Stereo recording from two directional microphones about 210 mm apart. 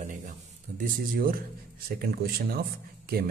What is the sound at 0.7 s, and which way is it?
Speech, 40° right (ahead or behind).